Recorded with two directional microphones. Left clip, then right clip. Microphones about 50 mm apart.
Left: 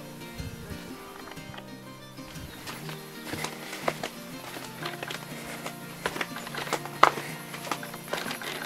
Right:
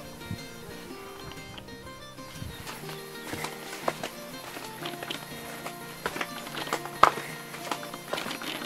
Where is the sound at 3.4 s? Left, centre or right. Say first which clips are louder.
Left 1 dB; left.